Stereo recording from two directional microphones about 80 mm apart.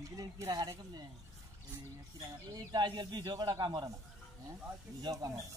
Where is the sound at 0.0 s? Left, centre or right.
Right.